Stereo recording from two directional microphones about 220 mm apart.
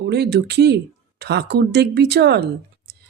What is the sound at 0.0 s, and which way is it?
Speech, 50° right (ahead or behind).